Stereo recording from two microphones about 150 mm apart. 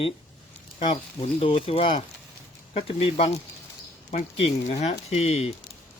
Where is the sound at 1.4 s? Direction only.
40° left (ahead or behind).